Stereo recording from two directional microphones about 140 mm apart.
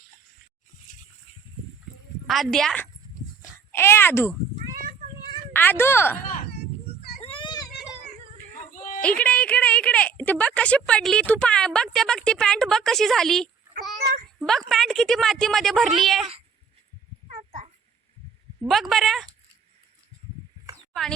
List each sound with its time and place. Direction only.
2.2 s a woman's voice: centre (ahead or behind)
3.7 s speech: 15° left (ahead or behind)
5.5 s speech: 15° left (ahead or behind)
6.2 s a sound: 70° left (ahead or behind)
7.2 s children playing: 40° left (ahead or behind)
8.7 s a sound: 65° left (ahead or behind)
9.0 s speech: 10° left (ahead or behind)
17.2 s a sound: 55° right (ahead or behind)
18.7 s speech: centre (ahead or behind)